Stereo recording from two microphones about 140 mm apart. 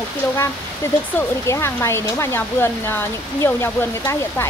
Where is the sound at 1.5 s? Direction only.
20° left (ahead or behind).